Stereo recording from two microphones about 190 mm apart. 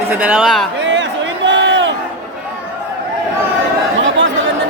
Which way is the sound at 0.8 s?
70° right (ahead or behind).